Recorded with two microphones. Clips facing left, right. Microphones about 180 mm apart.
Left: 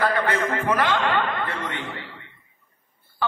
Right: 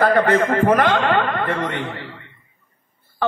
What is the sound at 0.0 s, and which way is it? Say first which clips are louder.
A man's voice: right 7 dB; 50° right (ahead or behind).